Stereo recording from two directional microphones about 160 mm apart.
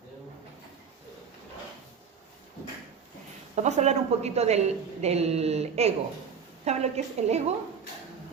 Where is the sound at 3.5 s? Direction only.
45° right (ahead or behind).